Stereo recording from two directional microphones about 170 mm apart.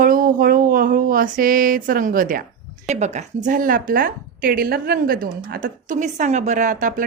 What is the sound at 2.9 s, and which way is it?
A woman's voice, 45° right (ahead or behind).